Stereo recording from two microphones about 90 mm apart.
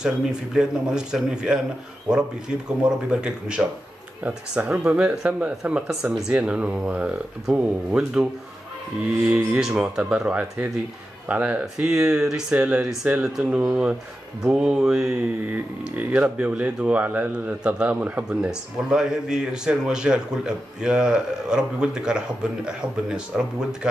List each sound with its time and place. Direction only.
0.0 s speech: 10° right (ahead or behind)
2.9 s speech: 10° right (ahead or behind)
9.6 s speech: 5° right (ahead or behind)